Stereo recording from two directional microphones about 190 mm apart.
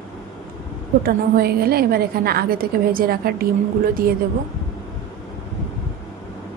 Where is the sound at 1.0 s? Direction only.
55° right (ahead or behind).